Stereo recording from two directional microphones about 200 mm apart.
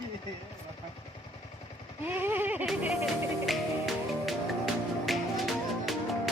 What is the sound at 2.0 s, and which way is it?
Speech, 10° right (ahead or behind).